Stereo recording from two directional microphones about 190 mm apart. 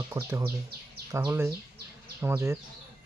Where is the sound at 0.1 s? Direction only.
15° right (ahead or behind).